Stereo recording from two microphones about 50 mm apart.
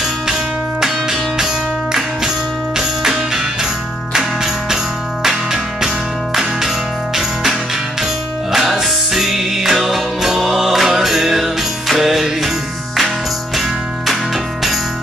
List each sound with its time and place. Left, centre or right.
0.3 s music: centre
4.1 s music: centre
8.5 s music: centre